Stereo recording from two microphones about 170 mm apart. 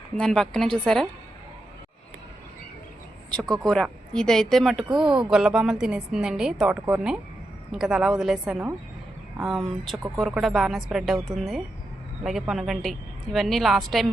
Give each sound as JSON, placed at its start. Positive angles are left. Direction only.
{"t": 0.2, "sound": "a woman's voice", "side_deg": 5}
{"t": 3.6, "sound": "a woman's voice", "side_deg": 0}